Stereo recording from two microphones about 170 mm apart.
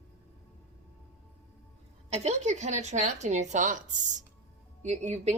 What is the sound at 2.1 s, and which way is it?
A woman's voice, 40° right (ahead or behind).